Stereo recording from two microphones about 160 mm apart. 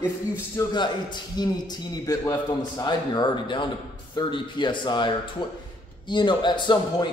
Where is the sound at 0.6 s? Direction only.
20° left (ahead or behind).